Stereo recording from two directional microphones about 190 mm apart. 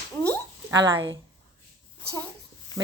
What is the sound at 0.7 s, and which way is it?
Speech, 20° right (ahead or behind).